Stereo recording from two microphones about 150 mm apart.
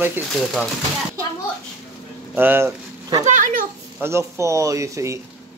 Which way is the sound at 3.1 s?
50° right (ahead or behind).